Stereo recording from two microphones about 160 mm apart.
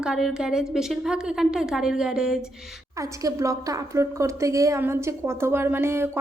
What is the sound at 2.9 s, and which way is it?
A woman's voice, 20° right (ahead or behind).